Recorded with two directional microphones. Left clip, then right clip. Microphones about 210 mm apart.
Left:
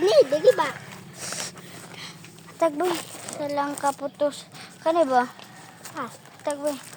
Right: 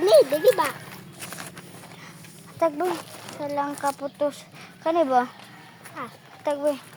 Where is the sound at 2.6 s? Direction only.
5° left (ahead or behind); by 5.2 s 15° right (ahead or behind).